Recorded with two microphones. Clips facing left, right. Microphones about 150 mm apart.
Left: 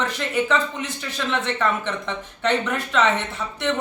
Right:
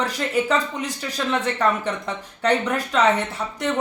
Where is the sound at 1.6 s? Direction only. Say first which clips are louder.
Right 2 dB; 40° right (ahead or behind).